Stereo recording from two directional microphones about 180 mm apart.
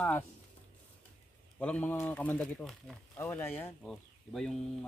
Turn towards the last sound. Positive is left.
turn(degrees=0)  # may be behind; listen again after turning